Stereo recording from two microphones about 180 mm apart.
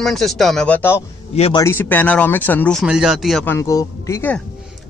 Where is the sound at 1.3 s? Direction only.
35° left (ahead or behind).